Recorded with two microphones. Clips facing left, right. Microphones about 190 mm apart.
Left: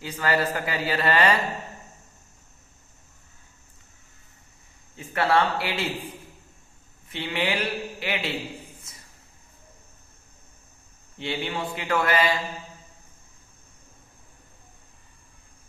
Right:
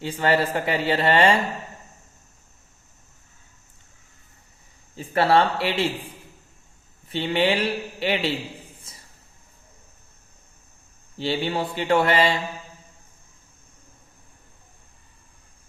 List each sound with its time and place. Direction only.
0.0 s speech: 30° right (ahead or behind)
4.9 s a man's voice: 30° right (ahead or behind)
7.1 s a man's voice: 30° right (ahead or behind)
8.9 s a sound: 30° right (ahead or behind)
11.2 s a man's voice: 35° right (ahead or behind)